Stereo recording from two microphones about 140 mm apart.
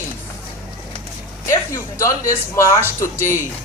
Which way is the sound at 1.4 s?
20° left (ahead or behind).